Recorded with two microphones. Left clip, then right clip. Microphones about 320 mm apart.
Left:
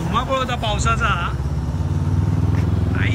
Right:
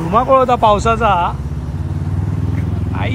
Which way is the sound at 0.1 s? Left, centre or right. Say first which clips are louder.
Right 10 dB; centre.